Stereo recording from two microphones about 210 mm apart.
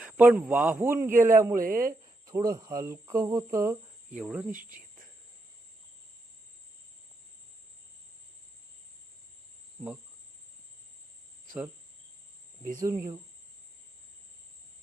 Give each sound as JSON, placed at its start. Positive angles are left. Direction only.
{"t": 0.0, "sound": "speech", "side_deg": -10}
{"t": 1.5, "sound": "speech", "side_deg": -40}
{"t": 2.2, "sound": "speech", "side_deg": -15}
{"t": 4.1, "sound": "cricket", "side_deg": -5}
{"t": 12.8, "sound": "speech", "side_deg": -15}